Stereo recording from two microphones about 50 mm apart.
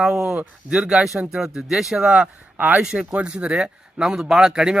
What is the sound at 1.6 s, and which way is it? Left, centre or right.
Speech, centre.